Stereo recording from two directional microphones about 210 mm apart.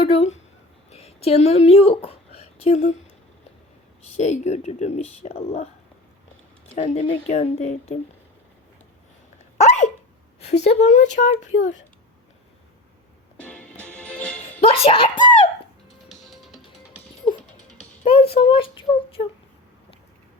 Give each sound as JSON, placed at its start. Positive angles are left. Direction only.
{"t": 0.0, "sound": "speech", "side_deg": 30}
{"t": 0.9, "sound": "a sound", "side_deg": 30}
{"t": 4.2, "sound": "speech", "side_deg": 35}
{"t": 6.7, "sound": "speech", "side_deg": 30}
{"t": 9.6, "sound": "hiccup", "side_deg": 35}
{"t": 10.4, "sound": "speech", "side_deg": 30}
{"t": 13.3, "sound": "music", "side_deg": 5}
{"t": 14.6, "sound": "a child's voice", "side_deg": 25}
{"t": 16.0, "sound": "music", "side_deg": 0}
{"t": 18.0, "sound": "speech", "side_deg": 25}